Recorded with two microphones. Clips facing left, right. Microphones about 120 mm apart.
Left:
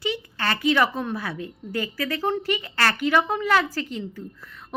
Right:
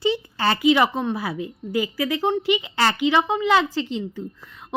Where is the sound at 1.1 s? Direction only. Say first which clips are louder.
Right 3 dB; 25° right (ahead or behind).